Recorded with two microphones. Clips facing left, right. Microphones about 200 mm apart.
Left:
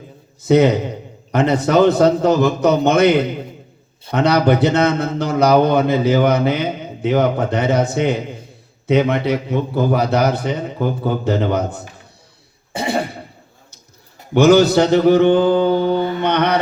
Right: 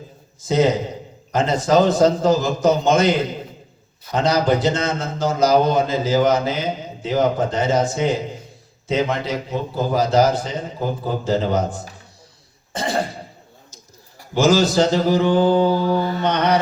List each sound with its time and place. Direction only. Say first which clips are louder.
0.4 s a man's voice: left 4 dB; 60° left (ahead or behind)
12.9 s throat clearing: left 2 dB; 60° left (ahead or behind)
14.3 s a man's voice: left 5 dB; 60° left (ahead or behind)
15.7 s mantra: left 3 dB; 25° left (ahead or behind)
16.2 s a man's voice: left 1 dB; 60° left (ahead or behind)